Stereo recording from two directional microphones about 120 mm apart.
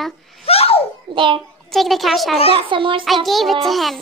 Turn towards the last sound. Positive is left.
turn(degrees=0)  # may be behind; listen again after turning